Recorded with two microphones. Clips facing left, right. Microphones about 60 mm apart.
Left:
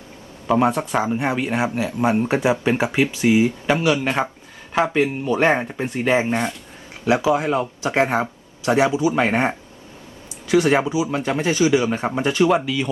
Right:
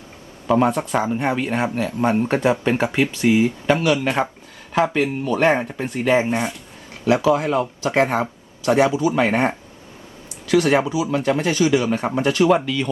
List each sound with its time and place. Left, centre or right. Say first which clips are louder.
0.4 s speech: even; centre
6.2 s speech: even; centre
7.0 s speech: right 1 dB; centre